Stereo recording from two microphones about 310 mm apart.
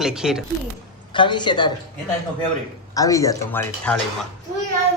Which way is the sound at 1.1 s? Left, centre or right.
Centre.